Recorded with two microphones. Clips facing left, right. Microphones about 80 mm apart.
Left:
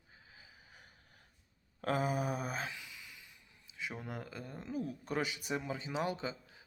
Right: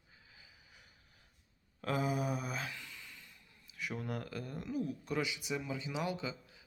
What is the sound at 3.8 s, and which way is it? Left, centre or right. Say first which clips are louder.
Speech: right 2 dB; left.